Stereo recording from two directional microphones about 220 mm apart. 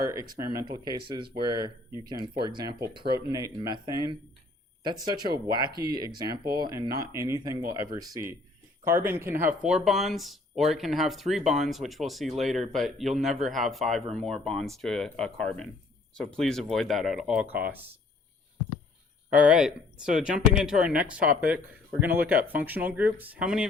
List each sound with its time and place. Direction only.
0.0 s speech: 15° right (ahead or behind)
6.3 s speech: 45° right (ahead or behind)
6.6 s speech: 15° right (ahead or behind)
19.4 s speech: 5° right (ahead or behind)